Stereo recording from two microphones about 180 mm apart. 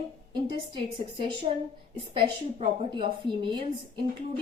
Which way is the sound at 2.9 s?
25° right (ahead or behind).